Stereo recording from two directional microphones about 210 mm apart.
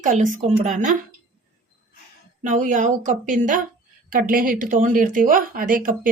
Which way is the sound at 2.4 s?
40° right (ahead or behind).